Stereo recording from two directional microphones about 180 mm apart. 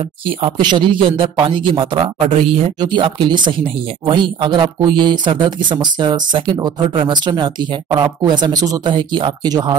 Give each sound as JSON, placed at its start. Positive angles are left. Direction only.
{"t": 0.4, "sound": "speech", "side_deg": -25}